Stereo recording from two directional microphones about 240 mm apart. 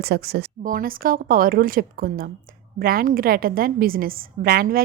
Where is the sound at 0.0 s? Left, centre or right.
Right.